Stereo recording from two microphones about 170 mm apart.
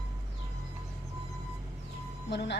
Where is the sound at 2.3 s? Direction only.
90° left.